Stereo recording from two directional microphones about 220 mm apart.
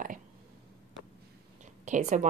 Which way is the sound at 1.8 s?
35° right (ahead or behind).